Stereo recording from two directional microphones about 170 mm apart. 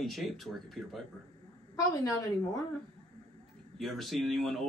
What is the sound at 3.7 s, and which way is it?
Speech, centre (ahead or behind).